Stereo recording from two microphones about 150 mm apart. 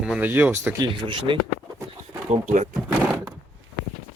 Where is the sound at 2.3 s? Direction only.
50° right (ahead or behind).